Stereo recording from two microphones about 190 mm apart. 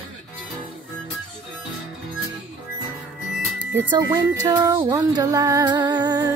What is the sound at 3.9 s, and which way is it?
Music, 20° right (ahead or behind).